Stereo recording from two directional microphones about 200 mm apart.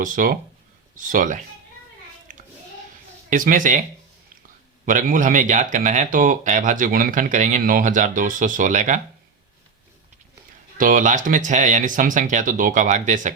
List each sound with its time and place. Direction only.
0.0 s speech: 45° right (ahead or behind)
2.3 s a sound: 40° right (ahead or behind)
3.2 s speech: 45° right (ahead or behind)
4.9 s speech: 40° right (ahead or behind)
10.8 s speech: 40° right (ahead or behind)